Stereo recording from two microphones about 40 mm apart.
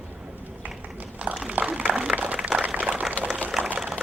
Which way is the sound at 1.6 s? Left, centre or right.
Right.